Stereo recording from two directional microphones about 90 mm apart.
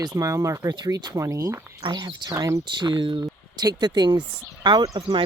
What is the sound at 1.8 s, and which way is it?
Speech, 50° right (ahead or behind).